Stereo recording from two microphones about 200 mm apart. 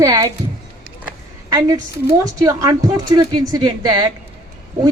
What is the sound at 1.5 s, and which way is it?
A woman's voice, 20° right (ahead or behind).